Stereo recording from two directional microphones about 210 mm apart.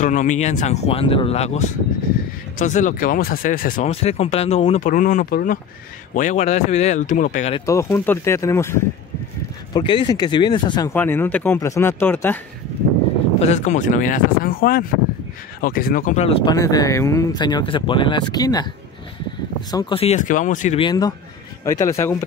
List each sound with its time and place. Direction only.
0.0 s speech: 35° left (ahead or behind)
3.9 s speech: 30° left (ahead or behind); by 5.6 s 45° left (ahead or behind)
6.1 s speech: 35° left (ahead or behind)
7.5 s speech: 15° left (ahead or behind)
13.4 s speech: 35° left (ahead or behind)
16.5 s speech: 15° left (ahead or behind)
19.7 s speech: 20° left (ahead or behind); by 20.8 s 35° left (ahead or behind)
20.8 s speech: 20° left (ahead or behind)